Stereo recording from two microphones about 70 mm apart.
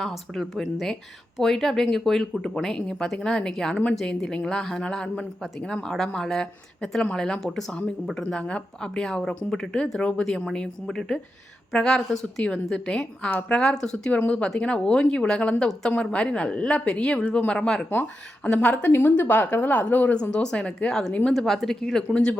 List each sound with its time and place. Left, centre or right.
0.0 s a woman's voice: centre; by 20.1 s left
20.3 s speech: centre